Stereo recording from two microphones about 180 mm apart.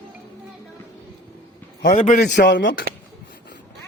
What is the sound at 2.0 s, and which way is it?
Speech, 65° left (ahead or behind).